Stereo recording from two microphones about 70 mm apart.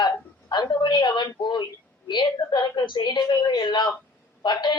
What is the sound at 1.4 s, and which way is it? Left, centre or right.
Speech, left.